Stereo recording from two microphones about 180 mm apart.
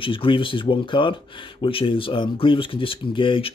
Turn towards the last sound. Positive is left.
turn(degrees=30)  # may be behind; listen again after turning